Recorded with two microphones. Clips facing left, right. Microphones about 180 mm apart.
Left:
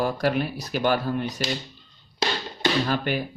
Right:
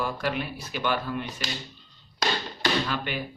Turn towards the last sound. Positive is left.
turn(degrees=45)  # may be behind; listen again after turning